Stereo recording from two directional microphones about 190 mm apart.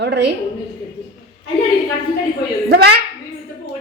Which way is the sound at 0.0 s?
65° right (ahead or behind).